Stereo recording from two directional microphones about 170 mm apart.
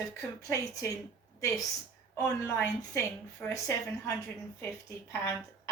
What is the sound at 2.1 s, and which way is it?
A woman's voice, 15° left (ahead or behind).